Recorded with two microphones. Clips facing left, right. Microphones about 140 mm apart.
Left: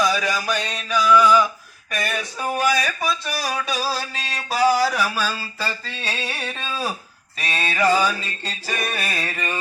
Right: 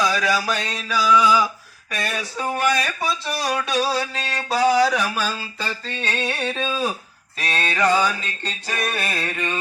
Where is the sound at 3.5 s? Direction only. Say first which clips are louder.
Right 3 dB; centre (ahead or behind).